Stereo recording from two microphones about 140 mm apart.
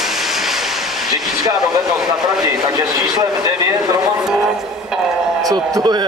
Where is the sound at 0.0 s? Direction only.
Centre (ahead or behind).